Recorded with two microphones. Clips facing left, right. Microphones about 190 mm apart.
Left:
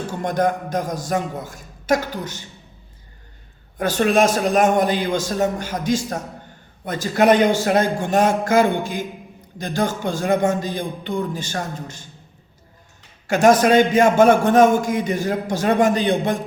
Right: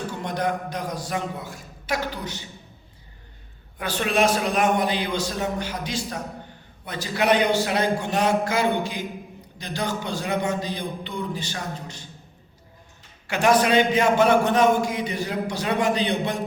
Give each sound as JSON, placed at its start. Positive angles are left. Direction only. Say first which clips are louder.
{"t": 0.2, "sound": "a man's voice", "louder": "left 7 dB", "side_deg": 45}
{"t": 3.8, "sound": "a man's voice", "louder": "left 6 dB", "side_deg": 45}
{"t": 13.2, "sound": "a man's voice", "louder": "left 5 dB", "side_deg": 45}